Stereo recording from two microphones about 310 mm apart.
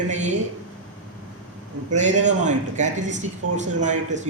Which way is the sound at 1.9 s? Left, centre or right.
Right.